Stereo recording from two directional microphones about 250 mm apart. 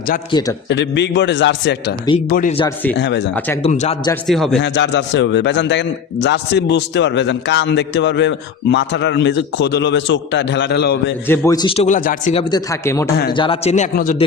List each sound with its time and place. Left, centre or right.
0.3 s speech: centre
0.7 s a man's voice: left
2.3 s speech: left
2.6 s speech: centre
3.0 s a man's voice: left
3.6 s speech: left
4.3 s speech: centre
4.6 s a man's voice: left
11.3 s speech: centre; by 14.2 s left